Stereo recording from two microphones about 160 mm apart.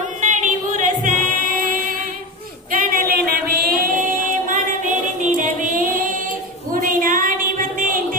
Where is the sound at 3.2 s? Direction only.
70° right (ahead or behind).